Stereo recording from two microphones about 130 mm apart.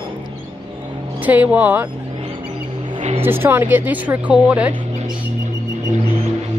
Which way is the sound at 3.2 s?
15° right (ahead or behind).